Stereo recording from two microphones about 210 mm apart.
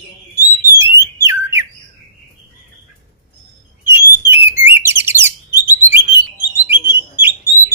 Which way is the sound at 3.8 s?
10° right (ahead or behind).